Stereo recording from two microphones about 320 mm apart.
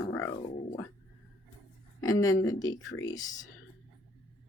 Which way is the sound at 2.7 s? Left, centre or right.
Left.